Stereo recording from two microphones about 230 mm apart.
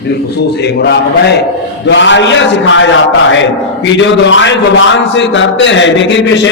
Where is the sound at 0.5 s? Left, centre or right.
Left.